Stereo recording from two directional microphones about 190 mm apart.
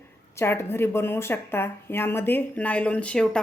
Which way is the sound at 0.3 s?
15° left (ahead or behind).